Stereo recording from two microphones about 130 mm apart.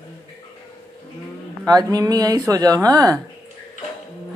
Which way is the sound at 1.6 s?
30° right (ahead or behind).